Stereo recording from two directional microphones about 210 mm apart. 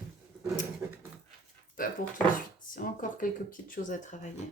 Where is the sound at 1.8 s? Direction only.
40° left (ahead or behind).